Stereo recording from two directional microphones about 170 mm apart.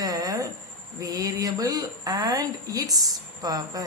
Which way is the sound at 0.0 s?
20° right (ahead or behind).